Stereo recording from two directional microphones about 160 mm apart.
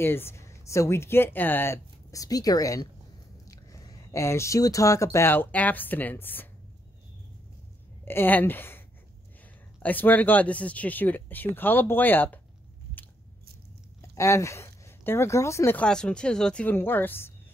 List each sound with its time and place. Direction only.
0.0 s speech: 15° left (ahead or behind)
8.0 s speech: 15° left (ahead or behind)
14.1 s speech: 20° left (ahead or behind)